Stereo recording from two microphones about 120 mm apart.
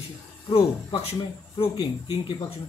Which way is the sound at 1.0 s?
55° left (ahead or behind).